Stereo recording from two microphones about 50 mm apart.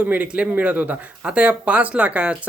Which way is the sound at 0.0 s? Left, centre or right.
Right.